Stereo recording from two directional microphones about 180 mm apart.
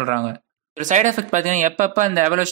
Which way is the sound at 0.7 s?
45° right (ahead or behind).